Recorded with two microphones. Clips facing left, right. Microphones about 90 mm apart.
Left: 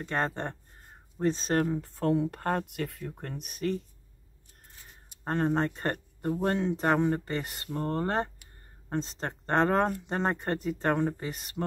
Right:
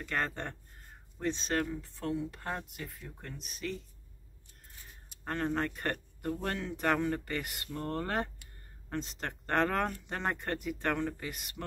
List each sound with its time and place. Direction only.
0.0 s speech: 30° left (ahead or behind); by 3.8 s 50° left (ahead or behind)
5.2 s speech: 30° left (ahead or behind)